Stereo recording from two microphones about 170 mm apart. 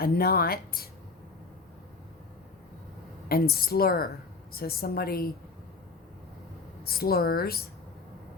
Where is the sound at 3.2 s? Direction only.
65° left (ahead or behind).